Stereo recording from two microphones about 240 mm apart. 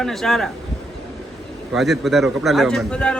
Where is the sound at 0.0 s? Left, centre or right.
Centre.